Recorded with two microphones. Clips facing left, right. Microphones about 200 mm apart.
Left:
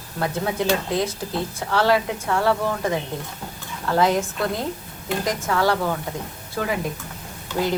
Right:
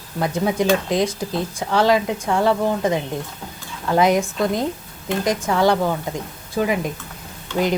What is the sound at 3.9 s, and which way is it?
Speech, 15° right (ahead or behind).